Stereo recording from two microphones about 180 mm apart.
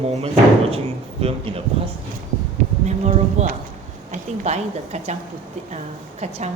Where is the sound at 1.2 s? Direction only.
35° right (ahead or behind).